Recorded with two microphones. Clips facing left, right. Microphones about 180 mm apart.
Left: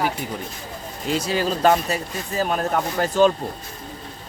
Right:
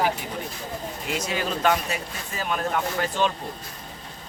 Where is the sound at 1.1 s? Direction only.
35° left (ahead or behind).